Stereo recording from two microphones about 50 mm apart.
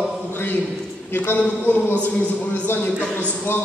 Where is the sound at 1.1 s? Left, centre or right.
Left.